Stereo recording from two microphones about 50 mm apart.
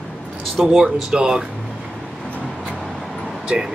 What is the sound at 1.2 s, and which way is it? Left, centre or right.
Speech, centre.